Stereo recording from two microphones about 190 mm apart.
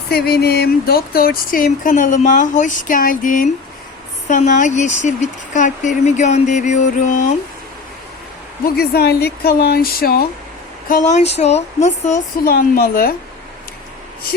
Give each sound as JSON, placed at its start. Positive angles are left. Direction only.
{"t": 0.1, "sound": "speech", "side_deg": 55}
{"t": 8.6, "sound": "speech", "side_deg": 55}
{"t": 10.8, "sound": "speech", "side_deg": 40}